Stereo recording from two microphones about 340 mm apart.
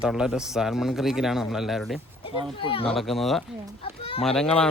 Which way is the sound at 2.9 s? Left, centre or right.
Centre.